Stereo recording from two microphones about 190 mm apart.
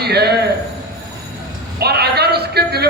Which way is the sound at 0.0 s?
60° right (ahead or behind).